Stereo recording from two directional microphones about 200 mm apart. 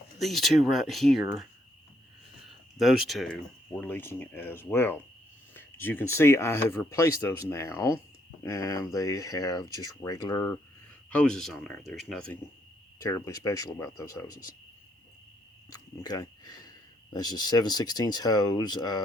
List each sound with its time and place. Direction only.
0.2 s speech: centre (ahead or behind)
2.7 s speech: centre (ahead or behind); by 10.5 s 15° left (ahead or behind)
11.1 s speech: 5° left (ahead or behind)
13.0 s speech: 15° left (ahead or behind)
15.7 s speech: 20° left (ahead or behind)